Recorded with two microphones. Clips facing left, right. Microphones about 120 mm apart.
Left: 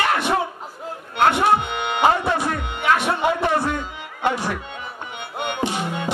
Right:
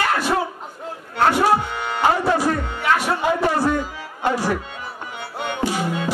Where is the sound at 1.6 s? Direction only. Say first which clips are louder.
Left 1 dB; 65° left (ahead or behind).